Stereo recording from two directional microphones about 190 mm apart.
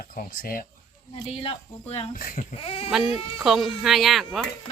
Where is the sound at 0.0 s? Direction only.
50° left (ahead or behind).